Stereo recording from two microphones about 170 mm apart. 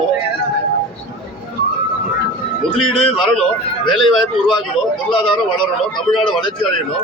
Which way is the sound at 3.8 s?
30° left (ahead or behind).